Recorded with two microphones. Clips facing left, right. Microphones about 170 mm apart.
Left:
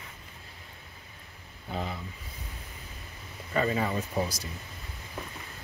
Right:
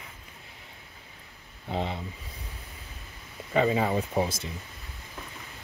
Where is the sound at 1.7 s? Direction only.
30° right (ahead or behind).